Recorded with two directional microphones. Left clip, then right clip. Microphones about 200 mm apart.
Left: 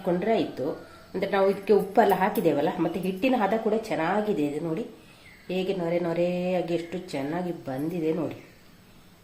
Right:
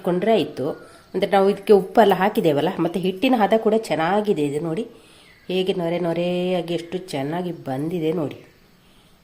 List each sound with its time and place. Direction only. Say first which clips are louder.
0.0 s a woman's voice: right 6 dB; 45° right (ahead or behind)